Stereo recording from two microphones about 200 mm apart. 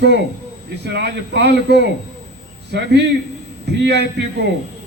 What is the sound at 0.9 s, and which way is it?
A man's voice, 60° right (ahead or behind).